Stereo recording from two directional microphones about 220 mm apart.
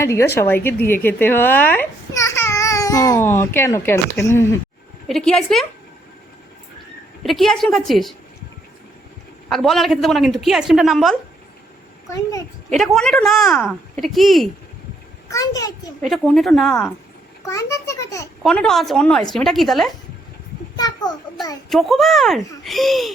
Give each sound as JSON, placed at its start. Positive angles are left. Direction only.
{"t": 0.0, "sound": "a child's voice", "side_deg": 10}
{"t": 5.0, "sound": "speech", "side_deg": 0}
{"t": 7.2, "sound": "speech", "side_deg": 0}
{"t": 9.5, "sound": "speech", "side_deg": 0}
{"t": 12.0, "sound": "a child's voice", "side_deg": 15}
{"t": 12.7, "sound": "speech", "side_deg": 0}
{"t": 15.3, "sound": "a child's voice", "side_deg": 15}
{"t": 16.0, "sound": "speech", "side_deg": 5}
{"t": 17.4, "sound": "a child's voice", "side_deg": 15}
{"t": 18.4, "sound": "speech", "side_deg": 0}
{"t": 20.7, "sound": "a child's voice", "side_deg": 15}
{"t": 21.7, "sound": "speech", "side_deg": 0}